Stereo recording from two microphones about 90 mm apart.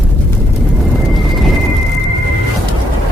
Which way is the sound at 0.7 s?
Centre (ahead or behind).